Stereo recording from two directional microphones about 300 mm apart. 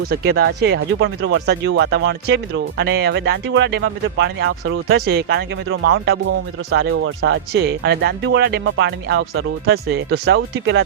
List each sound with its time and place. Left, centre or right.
0.1 s speech: right